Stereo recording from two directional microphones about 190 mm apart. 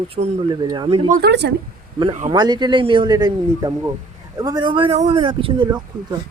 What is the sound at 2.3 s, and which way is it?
A man's voice, 20° right (ahead or behind).